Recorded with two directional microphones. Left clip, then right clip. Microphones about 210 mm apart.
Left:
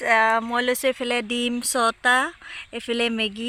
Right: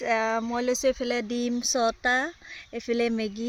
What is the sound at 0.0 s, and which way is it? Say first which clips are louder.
Speech: left 7 dB; centre (ahead or behind).